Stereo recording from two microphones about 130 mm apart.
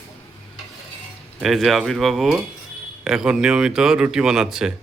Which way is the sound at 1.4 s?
Centre (ahead or behind).